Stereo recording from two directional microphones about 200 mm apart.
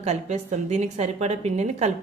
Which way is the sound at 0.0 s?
35° right (ahead or behind).